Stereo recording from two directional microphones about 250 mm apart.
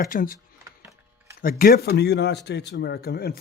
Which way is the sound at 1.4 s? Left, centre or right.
Left.